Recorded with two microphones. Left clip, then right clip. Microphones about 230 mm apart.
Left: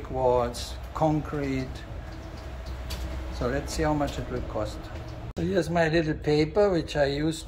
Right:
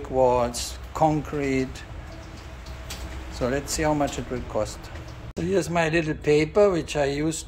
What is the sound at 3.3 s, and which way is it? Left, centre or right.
Speech, centre.